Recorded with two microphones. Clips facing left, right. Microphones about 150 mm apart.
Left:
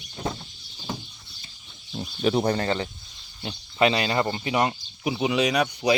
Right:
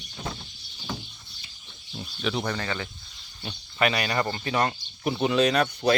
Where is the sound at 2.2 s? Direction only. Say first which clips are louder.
Left 6 dB; 35° left (ahead or behind).